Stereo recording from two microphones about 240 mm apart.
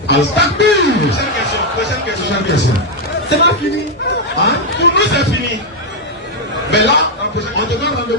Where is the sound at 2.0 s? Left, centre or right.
Left.